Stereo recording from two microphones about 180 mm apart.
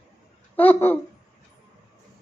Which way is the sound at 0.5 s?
10° left (ahead or behind).